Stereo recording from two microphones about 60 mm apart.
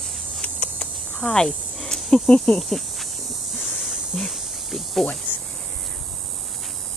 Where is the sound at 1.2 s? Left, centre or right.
Centre.